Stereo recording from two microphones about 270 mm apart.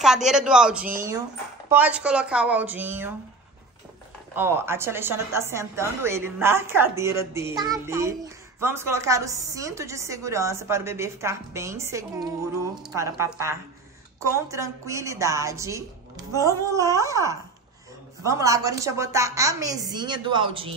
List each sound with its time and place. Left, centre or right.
0.0 s a woman's voice: centre
4.4 s a woman's voice: centre